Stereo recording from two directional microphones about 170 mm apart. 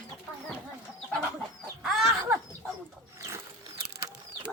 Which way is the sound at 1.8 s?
Centre (ahead or behind).